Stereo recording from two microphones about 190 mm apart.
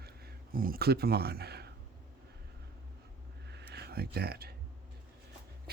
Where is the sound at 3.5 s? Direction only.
60° right (ahead or behind).